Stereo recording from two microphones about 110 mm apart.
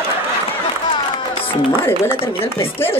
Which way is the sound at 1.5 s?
20° left (ahead or behind).